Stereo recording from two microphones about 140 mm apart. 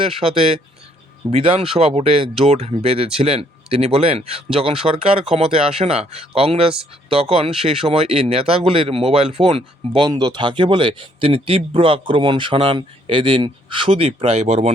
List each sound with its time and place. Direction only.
0.0 s speech: 40° right (ahead or behind)
10.1 s speech: 30° right (ahead or behind); by 14.7 s 50° right (ahead or behind)